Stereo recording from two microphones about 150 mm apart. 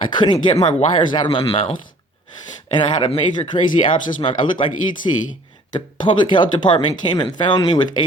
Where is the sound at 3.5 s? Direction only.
25° left (ahead or behind).